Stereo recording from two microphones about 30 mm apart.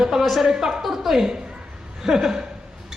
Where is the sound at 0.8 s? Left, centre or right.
Centre.